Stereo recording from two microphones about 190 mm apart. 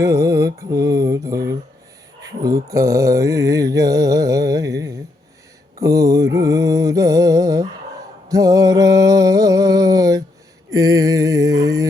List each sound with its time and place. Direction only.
0.0 s mantra: 15° right (ahead or behind)
5.8 s mantra: 15° right (ahead or behind)
8.3 s music: 20° right (ahead or behind)
10.7 s mantra: 20° right (ahead or behind)